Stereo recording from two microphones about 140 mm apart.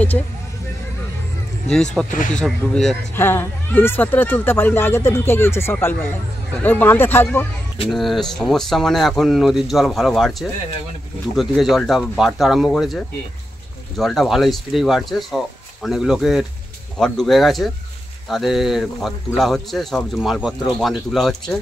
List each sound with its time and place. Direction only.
1.7 s a man's voice: 5° left (ahead or behind)
3.2 s speech: 15° left (ahead or behind)
7.9 s a man's voice: centre (ahead or behind)